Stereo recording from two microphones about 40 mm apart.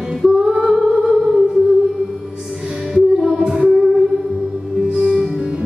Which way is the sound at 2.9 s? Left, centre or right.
Centre.